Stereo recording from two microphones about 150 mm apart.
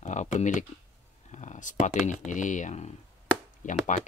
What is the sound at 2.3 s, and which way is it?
Speech, 55° left (ahead or behind).